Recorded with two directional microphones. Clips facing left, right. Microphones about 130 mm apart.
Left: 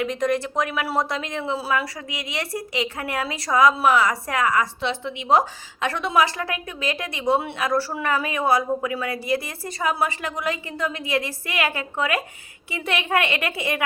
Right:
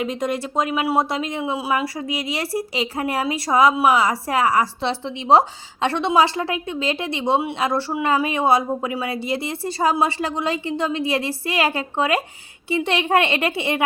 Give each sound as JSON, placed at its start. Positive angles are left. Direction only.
{"t": 0.0, "sound": "speech", "side_deg": -25}
{"t": 1.4, "sound": "speech", "side_deg": -15}
{"t": 1.8, "sound": "a woman's voice", "side_deg": -30}